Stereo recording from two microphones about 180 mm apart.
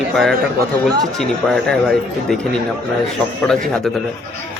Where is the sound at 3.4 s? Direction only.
5° left (ahead or behind).